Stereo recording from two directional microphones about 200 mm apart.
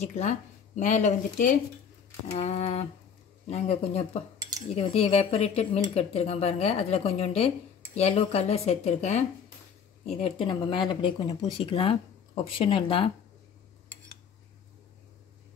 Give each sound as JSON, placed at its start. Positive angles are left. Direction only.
{"t": 0.0, "sound": "speech", "side_deg": 35}